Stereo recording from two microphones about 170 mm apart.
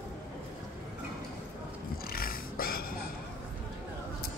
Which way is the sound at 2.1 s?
60° left (ahead or behind).